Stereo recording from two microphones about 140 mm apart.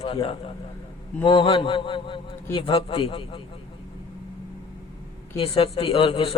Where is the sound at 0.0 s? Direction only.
40° left (ahead or behind).